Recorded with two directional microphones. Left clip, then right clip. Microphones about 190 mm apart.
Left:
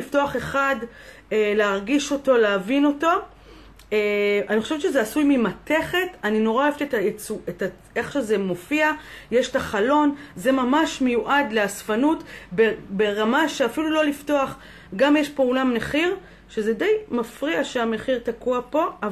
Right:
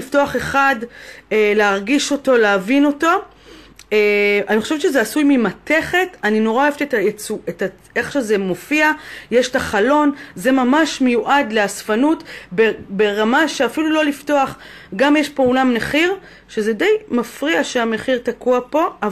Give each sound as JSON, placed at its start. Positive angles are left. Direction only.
{"t": 0.1, "sound": "speech", "side_deg": -50}